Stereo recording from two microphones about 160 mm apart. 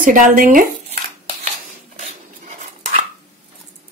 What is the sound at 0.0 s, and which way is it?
Speech, 60° right (ahead or behind).